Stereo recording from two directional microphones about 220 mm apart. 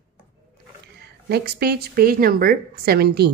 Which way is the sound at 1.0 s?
45° right (ahead or behind).